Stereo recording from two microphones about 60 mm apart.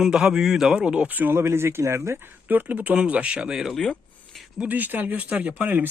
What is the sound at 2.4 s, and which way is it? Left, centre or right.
Speech, right.